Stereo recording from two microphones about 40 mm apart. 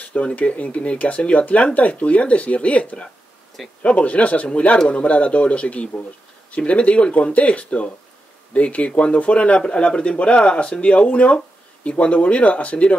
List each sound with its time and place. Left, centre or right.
0.0 s speech: left